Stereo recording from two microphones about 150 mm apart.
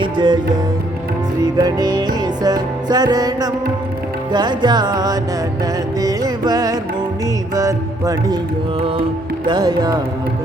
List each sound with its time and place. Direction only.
0.0 s music: 30° right (ahead or behind)
1.5 s music: 25° right (ahead or behind)
9.5 s music: 25° right (ahead or behind)